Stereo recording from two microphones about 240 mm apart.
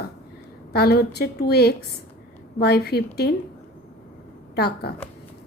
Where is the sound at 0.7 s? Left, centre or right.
Left.